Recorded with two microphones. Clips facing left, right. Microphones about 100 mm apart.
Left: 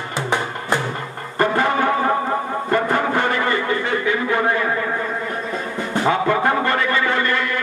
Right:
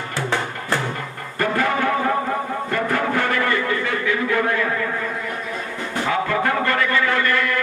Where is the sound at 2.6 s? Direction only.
25° left (ahead or behind).